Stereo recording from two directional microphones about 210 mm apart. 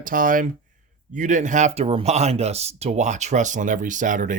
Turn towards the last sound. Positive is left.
turn(degrees=-40)  # may be behind; listen again after turning